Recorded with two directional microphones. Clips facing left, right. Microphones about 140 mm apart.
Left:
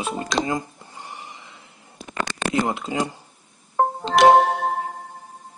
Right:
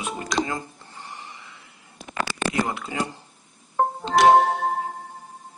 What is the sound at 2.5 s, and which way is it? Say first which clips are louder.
Speech: left 6 dB; 20° left (ahead or behind).